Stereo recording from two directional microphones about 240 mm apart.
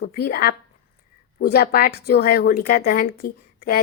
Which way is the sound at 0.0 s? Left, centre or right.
Left.